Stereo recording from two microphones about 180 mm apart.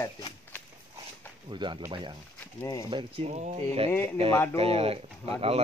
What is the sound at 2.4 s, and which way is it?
Speech, 15° left (ahead or behind).